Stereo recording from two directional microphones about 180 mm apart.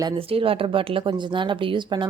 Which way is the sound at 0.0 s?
30° right (ahead or behind).